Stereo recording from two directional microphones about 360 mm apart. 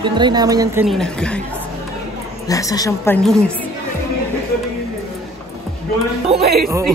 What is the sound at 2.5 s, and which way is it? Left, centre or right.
A woman's voice, centre.